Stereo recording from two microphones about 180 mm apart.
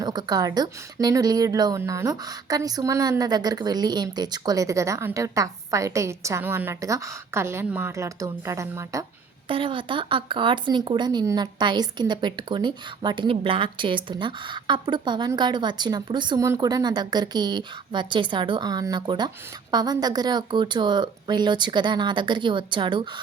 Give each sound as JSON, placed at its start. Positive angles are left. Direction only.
{"t": 0.0, "sound": "speech", "side_deg": -25}
{"t": 9.5, "sound": "speech", "side_deg": -30}